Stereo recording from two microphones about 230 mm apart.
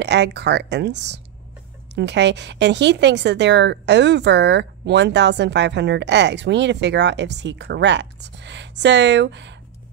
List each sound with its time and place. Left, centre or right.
0.0 s a woman's voice: right